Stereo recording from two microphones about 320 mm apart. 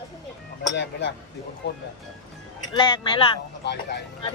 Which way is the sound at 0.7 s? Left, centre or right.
Left.